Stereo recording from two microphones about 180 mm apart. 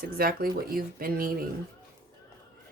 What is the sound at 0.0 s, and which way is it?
Speech, 55° right (ahead or behind).